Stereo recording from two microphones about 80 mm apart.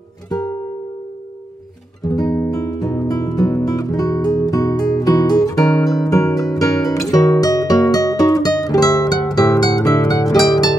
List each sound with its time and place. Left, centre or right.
0.3 s music: left
2.0 s music: left